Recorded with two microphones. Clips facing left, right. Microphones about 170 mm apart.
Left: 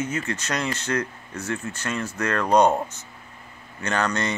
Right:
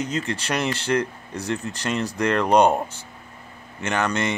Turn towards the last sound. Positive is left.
turn(degrees=-20)  # may be behind; listen again after turning